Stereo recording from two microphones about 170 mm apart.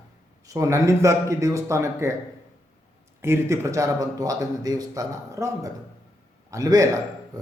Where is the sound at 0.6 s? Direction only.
15° right (ahead or behind).